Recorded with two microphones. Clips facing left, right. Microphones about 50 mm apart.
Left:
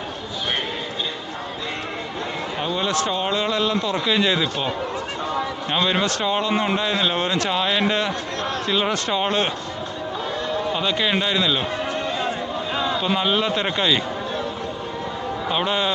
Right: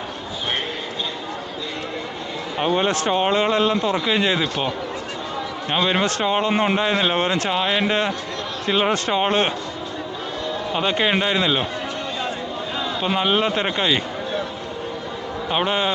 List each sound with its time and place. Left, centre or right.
2.6 s a man's voice: right
5.7 s a man's voice: centre
6.1 s a man's voice: right
10.7 s speech: right
12.7 s a sound: centre
13.0 s a man's voice: centre
15.4 s speech: centre